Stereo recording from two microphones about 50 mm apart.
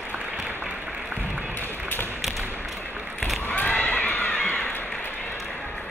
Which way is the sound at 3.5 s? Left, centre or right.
Left.